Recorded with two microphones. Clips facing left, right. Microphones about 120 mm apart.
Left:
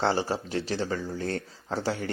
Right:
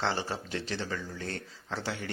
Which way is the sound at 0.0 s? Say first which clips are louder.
Left 6 dB; 35° left (ahead or behind).